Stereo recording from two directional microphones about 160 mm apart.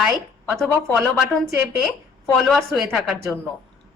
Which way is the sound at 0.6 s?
10° left (ahead or behind).